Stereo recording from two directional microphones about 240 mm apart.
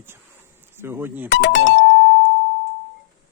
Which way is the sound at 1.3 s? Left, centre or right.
Left.